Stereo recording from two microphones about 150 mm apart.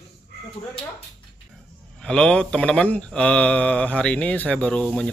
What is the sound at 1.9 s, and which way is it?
Speech, 5° left (ahead or behind).